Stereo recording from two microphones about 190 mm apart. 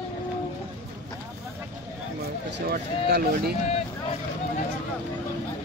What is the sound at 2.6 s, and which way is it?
Speech, 55° right (ahead or behind).